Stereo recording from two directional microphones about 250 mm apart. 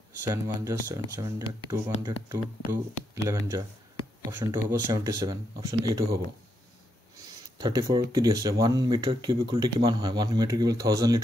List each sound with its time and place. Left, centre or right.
0.2 s speech: centre
7.5 s speech: centre